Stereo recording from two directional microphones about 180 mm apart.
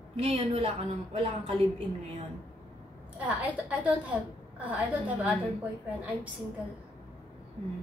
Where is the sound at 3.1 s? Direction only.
10° right (ahead or behind).